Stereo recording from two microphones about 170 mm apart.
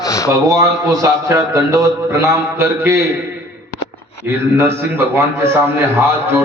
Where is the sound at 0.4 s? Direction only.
20° right (ahead or behind).